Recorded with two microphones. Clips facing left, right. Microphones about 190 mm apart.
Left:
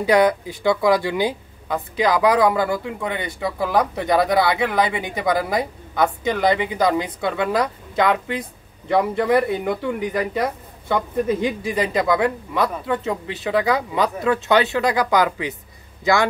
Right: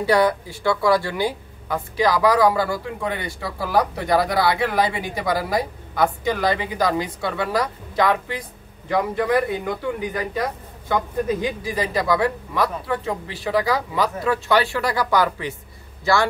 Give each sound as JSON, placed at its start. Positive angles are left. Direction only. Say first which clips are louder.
{"t": 0.0, "sound": "speech", "louder": "left 2 dB", "side_deg": 15}
{"t": 11.4, "sound": "a man's voice", "louder": "left 3 dB", "side_deg": 25}